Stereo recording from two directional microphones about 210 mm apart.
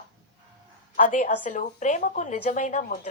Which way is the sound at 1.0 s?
35° left (ahead or behind).